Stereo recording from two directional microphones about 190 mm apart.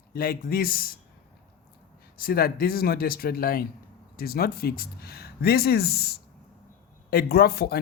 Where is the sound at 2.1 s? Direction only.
50° left (ahead or behind).